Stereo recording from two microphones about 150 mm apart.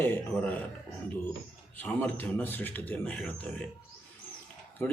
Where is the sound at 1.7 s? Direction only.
10° left (ahead or behind).